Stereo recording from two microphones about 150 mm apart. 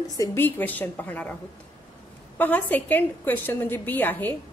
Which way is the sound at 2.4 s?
10° left (ahead or behind).